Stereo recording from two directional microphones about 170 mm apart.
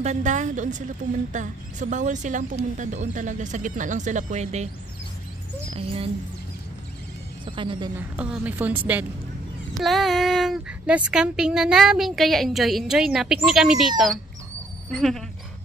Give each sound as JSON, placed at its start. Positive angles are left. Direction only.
{"t": 0.0, "sound": "speech", "side_deg": -45}
{"t": 7.4, "sound": "a woman's voice", "side_deg": -30}
{"t": 7.9, "sound": "a woman's voice", "side_deg": -10}